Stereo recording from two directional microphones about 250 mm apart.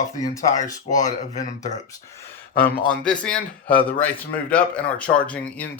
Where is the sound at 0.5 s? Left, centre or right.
Left.